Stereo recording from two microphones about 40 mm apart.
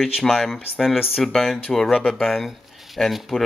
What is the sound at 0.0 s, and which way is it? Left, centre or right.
Speech, centre.